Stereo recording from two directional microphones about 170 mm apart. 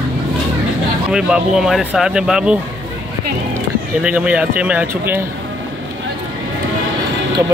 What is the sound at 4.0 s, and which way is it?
Speech, 5° right (ahead or behind).